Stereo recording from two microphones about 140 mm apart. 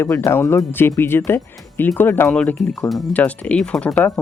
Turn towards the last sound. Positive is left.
turn(degrees=10)  # may be behind; listen again after turning